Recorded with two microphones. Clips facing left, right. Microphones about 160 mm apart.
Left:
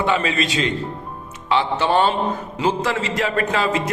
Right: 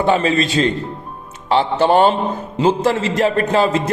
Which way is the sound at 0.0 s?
35° right (ahead or behind).